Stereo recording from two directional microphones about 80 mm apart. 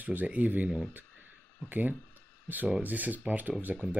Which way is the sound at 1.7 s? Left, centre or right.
Right.